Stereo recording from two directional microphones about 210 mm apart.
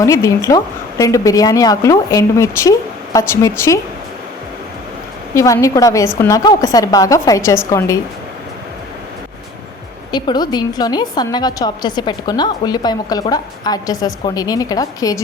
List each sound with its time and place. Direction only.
0.0 s a woman's voice: 15° left (ahead or behind)
5.3 s a woman's voice: 15° left (ahead or behind)
10.1 s a woman's voice: 20° left (ahead or behind)